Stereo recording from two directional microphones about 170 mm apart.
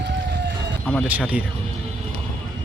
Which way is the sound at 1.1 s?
10° right (ahead or behind).